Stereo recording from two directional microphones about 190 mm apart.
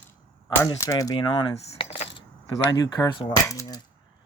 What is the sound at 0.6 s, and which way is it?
Speech, 15° left (ahead or behind).